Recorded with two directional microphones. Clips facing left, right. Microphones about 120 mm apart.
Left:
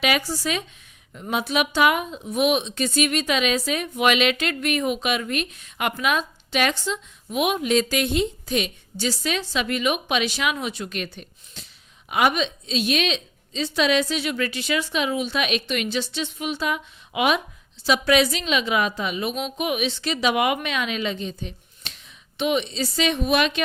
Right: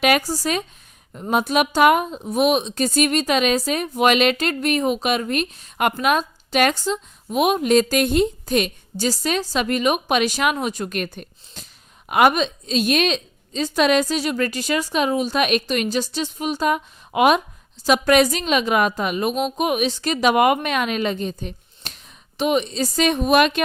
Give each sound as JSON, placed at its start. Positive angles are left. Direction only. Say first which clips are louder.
{"t": 0.0, "sound": "a woman's voice", "louder": "right 5 dB", "side_deg": -45}